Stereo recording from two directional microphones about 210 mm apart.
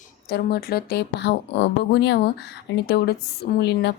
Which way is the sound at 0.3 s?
45° left (ahead or behind).